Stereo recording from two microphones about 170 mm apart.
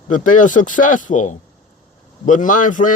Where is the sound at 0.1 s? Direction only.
50° left (ahead or behind).